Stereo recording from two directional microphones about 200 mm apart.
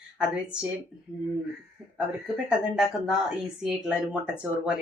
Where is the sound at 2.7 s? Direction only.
5° right (ahead or behind).